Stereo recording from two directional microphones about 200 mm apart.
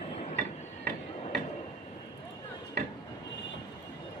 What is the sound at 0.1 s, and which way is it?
Hammer, 35° left (ahead or behind).